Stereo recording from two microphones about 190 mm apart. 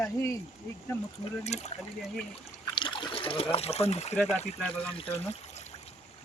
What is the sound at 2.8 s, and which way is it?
Trickle, 25° left (ahead or behind).